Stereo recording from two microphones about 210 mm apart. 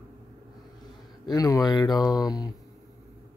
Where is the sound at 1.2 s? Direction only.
15° left (ahead or behind).